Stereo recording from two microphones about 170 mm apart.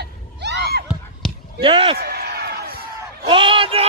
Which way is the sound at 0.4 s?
80° right.